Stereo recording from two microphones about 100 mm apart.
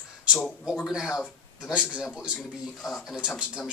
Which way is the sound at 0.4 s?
5° right (ahead or behind).